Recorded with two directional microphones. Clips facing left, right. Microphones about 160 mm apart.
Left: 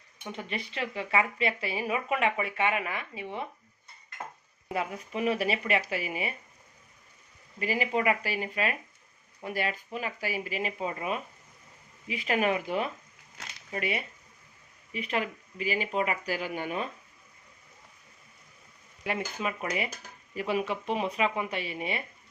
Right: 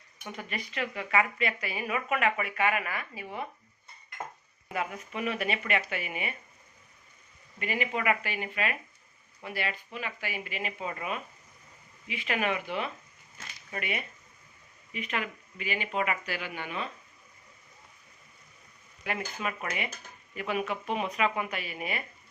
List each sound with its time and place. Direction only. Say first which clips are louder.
0.2 s a woman's voice: left 2 dB; 25° left (ahead or behind)
4.7 s speech: left 2 dB; 30° left (ahead or behind)
7.6 s speech: left 3 dB; 35° left (ahead or behind)
13.7 s speech: left 3 dB; 30° left (ahead or behind)
19.0 s a woman's voice: left 2 dB; 30° left (ahead or behind)